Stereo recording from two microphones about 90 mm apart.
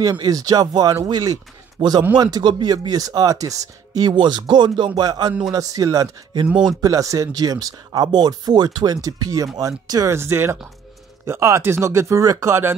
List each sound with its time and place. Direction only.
0.0 s speech: 50° right (ahead or behind)
4.1 s speech: 60° right (ahead or behind); by 10.1 s 40° right (ahead or behind)
10.1 s speech: 30° right (ahead or behind)